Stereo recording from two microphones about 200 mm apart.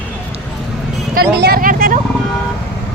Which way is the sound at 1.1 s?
50° right (ahead or behind).